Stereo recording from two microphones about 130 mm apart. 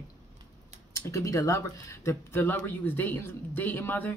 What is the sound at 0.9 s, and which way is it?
Speech, 20° left (ahead or behind).